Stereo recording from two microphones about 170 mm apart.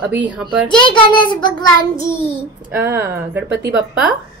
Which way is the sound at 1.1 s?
25° left (ahead or behind).